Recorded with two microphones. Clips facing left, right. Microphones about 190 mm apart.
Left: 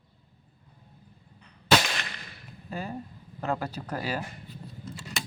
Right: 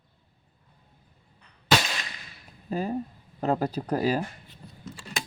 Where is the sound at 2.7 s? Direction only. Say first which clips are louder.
Right 6 dB; 40° right (ahead or behind).